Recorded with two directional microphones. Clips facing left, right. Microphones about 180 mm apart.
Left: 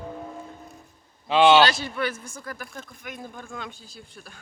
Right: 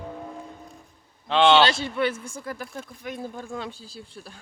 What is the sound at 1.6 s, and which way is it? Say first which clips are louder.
Speech: even; 25° right (ahead or behind).